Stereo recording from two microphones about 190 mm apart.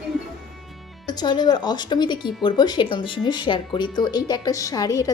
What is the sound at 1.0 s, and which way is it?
A woman's voice, 20° left (ahead or behind).